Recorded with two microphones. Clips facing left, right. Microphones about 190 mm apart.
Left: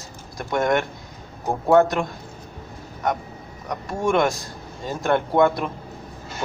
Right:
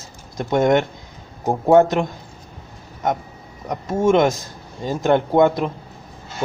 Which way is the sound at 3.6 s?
20° right (ahead or behind).